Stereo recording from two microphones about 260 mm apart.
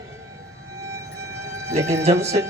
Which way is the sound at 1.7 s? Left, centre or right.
Centre.